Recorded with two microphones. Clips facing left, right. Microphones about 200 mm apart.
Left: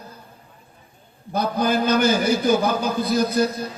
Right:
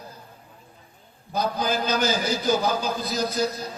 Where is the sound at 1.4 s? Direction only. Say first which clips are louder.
Left 4 dB; 55° left (ahead or behind).